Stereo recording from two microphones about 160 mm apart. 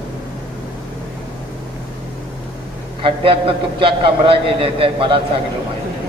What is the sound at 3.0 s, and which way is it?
A man's voice, 35° right (ahead or behind).